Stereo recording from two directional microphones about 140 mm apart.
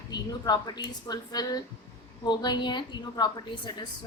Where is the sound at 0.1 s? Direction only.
30° left (ahead or behind).